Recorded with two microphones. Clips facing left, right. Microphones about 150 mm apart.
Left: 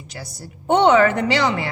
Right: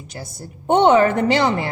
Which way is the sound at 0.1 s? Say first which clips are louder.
Right 1 dB; 50° right (ahead or behind).